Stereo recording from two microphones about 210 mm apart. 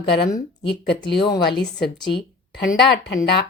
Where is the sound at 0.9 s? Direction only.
55° left (ahead or behind).